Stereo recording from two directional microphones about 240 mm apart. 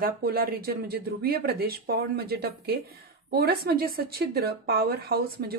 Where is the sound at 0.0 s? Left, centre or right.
Right.